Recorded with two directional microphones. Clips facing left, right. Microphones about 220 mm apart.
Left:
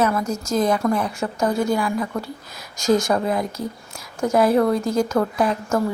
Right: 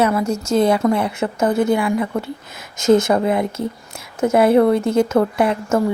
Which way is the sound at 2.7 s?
20° right (ahead or behind).